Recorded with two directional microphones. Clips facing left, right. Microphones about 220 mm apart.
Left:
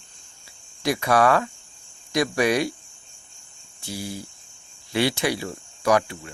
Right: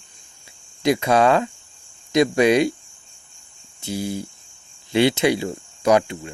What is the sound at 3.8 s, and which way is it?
Speech, 20° right (ahead or behind).